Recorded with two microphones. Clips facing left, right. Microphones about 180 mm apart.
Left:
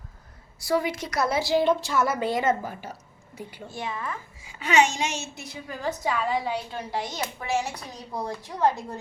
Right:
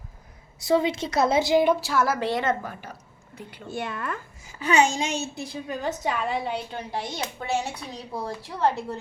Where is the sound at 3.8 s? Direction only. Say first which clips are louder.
Even; 60° right (ahead or behind).